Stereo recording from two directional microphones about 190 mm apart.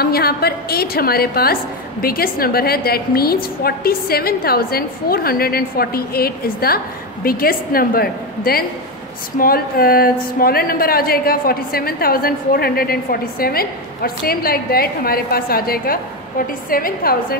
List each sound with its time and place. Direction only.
0.0 s a woman's voice: 55° left (ahead or behind)